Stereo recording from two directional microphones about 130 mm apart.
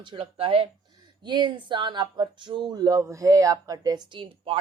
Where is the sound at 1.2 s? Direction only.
35° right (ahead or behind).